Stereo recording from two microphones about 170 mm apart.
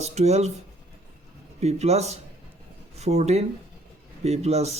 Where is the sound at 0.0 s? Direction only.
40° right (ahead or behind).